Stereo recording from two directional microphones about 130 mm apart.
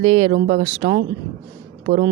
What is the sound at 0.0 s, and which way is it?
Speech, 45° right (ahead or behind).